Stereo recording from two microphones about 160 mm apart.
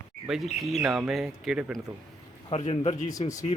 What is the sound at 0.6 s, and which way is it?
Speech, centre (ahead or behind).